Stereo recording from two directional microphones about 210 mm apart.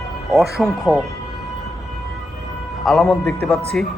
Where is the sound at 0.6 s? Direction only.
Centre (ahead or behind).